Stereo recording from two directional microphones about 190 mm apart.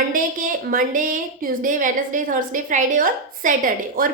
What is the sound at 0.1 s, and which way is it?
A woman's voice, 45° right (ahead or behind).